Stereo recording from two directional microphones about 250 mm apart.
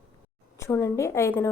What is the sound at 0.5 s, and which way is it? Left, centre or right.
Speech, centre.